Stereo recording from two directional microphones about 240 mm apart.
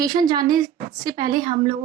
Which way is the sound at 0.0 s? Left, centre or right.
Centre.